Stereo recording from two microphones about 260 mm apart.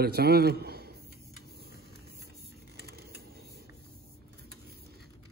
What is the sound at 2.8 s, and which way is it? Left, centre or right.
Vehicle, right.